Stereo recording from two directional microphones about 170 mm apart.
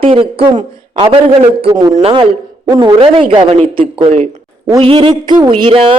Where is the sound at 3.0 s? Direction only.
30° right (ahead or behind).